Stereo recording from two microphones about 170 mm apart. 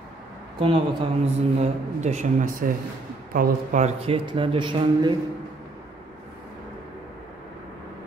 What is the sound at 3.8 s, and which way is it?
A man's voice, 35° right (ahead or behind).